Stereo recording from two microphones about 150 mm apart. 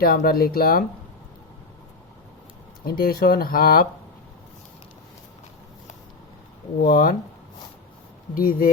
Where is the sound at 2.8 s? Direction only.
80° left.